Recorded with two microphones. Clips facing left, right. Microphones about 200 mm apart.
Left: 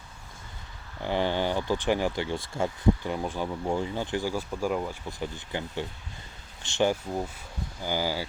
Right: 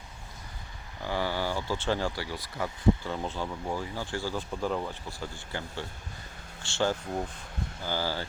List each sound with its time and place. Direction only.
1.0 s speech: 20° left (ahead or behind)